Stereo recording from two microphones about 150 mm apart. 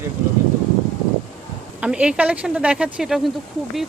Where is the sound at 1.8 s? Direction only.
5° right (ahead or behind).